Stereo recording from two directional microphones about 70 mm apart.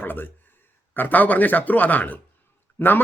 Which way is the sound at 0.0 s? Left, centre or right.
Left.